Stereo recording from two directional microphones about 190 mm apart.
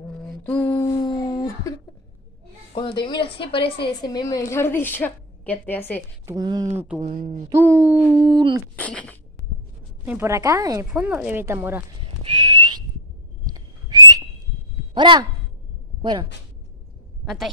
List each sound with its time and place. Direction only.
0.4 s a sound: 10° left (ahead or behind)
0.9 s a sound: 20° left (ahead or behind)
2.7 s a woman's voice: 25° left (ahead or behind); by 6.0 s 10° left (ahead or behind)
6.2 s speech: 20° right (ahead or behind)
7.1 s speech: 45° right (ahead or behind)
7.4 s speech: 15° right (ahead or behind)
8.7 s speech: 10° left (ahead or behind)
10.0 s speech: 15° right (ahead or behind)
10.9 s speech: 5° right (ahead or behind)
12.2 s whistling: 25° right (ahead or behind)
13.5 s whistle: 20° right (ahead or behind)
14.8 s a sound: 25° right (ahead or behind)
16.0 s a woman's voice: 25° right (ahead or behind)
17.2 s a sound: centre (ahead or behind)